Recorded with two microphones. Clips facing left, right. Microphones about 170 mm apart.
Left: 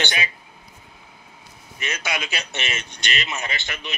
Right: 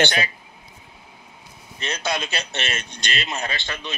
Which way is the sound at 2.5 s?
15° left (ahead or behind).